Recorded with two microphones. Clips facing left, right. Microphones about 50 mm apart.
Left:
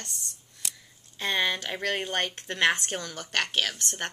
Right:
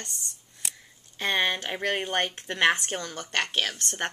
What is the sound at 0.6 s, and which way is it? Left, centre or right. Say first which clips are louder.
Scissors: right 1 dB; centre.